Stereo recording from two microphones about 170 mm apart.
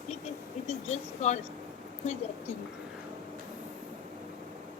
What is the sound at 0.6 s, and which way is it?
Speech, 40° left (ahead or behind).